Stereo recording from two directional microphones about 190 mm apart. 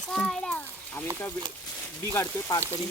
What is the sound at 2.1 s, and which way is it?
Speech, 15° left (ahead or behind).